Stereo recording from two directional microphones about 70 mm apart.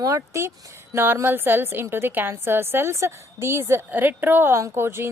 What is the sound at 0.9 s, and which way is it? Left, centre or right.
A woman's voice, right.